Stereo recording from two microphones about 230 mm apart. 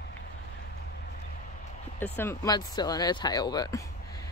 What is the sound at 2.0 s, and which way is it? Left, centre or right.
Speech, centre.